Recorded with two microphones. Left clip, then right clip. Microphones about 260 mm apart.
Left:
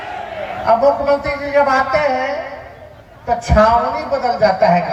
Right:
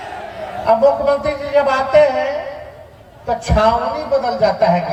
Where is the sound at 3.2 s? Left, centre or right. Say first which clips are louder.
Left 2 dB; right.